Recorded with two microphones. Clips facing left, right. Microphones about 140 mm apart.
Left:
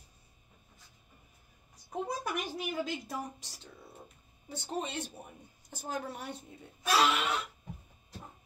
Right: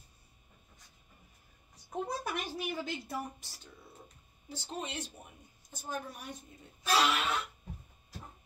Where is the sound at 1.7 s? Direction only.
5° left (ahead or behind).